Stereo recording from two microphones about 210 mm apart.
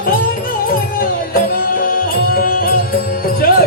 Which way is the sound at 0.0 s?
45° left (ahead or behind).